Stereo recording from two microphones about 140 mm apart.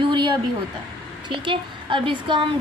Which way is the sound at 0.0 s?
35° right (ahead or behind).